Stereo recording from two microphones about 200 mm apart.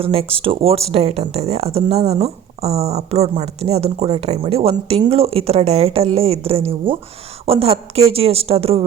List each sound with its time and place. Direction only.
0.0 s speech: 30° right (ahead or behind)